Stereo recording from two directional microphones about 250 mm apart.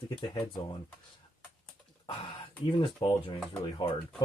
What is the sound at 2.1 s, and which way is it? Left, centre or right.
Speech, centre.